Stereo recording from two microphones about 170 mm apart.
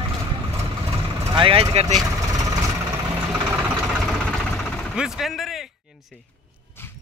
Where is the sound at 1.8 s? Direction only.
20° right (ahead or behind).